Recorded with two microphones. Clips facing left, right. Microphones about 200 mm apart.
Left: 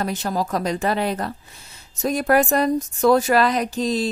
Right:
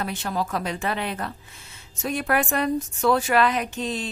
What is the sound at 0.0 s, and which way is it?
A woman's voice, 40° left (ahead or behind).